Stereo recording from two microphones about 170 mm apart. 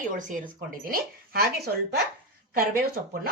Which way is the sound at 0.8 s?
60° right (ahead or behind).